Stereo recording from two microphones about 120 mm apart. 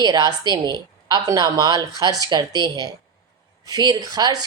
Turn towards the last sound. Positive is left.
turn(degrees=-30)  # may be behind; listen again after turning